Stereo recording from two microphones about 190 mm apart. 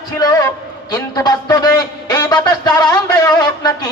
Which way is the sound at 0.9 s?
20° left (ahead or behind).